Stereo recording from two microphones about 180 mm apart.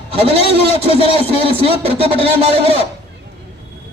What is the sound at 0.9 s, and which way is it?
Speech, 35° left (ahead or behind).